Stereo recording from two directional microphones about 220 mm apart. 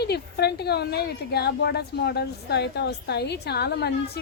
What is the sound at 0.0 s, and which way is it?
A woman's voice, 50° left (ahead or behind).